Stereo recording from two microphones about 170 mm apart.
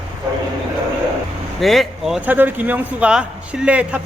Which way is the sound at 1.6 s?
Centre (ahead or behind).